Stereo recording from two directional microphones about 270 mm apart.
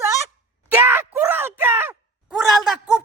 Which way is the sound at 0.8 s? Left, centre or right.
Centre.